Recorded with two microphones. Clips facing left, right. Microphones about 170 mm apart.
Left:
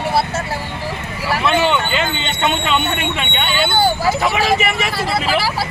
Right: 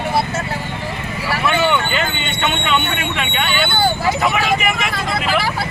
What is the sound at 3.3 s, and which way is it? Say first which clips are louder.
Speech: left 2 dB; 25° left (ahead or behind).